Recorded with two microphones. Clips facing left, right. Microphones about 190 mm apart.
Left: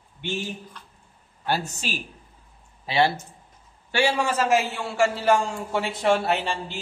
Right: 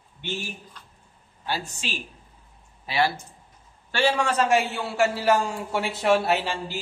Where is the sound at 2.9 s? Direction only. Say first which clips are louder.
Left 3 dB; 25° left (ahead or behind).